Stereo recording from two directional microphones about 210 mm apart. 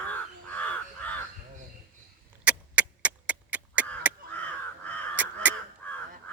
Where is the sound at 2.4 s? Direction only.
5° right (ahead or behind).